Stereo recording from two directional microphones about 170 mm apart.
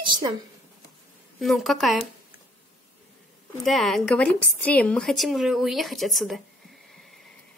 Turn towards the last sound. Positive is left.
turn(degrees=0)  # may be behind; listen again after turning